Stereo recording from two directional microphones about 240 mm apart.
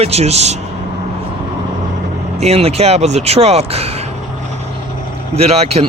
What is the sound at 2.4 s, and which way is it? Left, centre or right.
Speech, right.